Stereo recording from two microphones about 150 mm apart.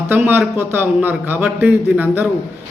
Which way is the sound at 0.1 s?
15° right (ahead or behind).